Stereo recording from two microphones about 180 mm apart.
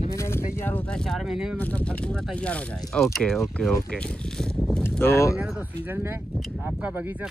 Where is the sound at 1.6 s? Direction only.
10° left (ahead or behind).